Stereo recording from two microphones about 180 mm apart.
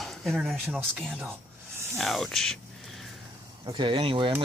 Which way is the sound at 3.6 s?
25° right (ahead or behind).